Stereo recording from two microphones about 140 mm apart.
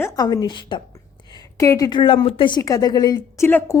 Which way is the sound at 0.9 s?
30° left (ahead or behind).